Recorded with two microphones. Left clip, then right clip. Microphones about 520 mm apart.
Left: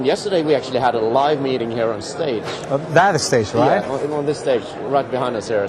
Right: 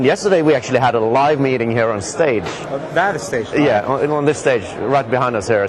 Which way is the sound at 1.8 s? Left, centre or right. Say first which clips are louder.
Right 5 dB; right.